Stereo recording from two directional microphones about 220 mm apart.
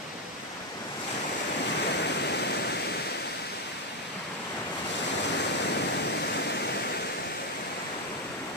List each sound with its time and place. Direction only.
1.9 s waterfall: 50° left (ahead or behind)
5.9 s waterfall: 50° left (ahead or behind)